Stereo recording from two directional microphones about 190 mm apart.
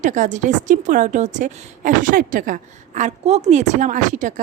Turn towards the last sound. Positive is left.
turn(degrees=-40)  # may be behind; listen again after turning